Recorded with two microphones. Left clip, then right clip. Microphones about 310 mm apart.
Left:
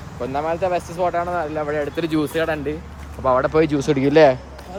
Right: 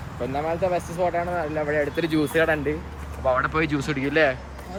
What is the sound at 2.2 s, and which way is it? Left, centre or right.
Speech, centre.